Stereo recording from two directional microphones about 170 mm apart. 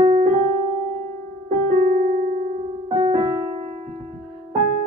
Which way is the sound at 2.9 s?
30° right (ahead or behind).